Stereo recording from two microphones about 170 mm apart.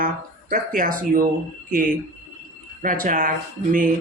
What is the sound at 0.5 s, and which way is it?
Speech, 55° right (ahead or behind).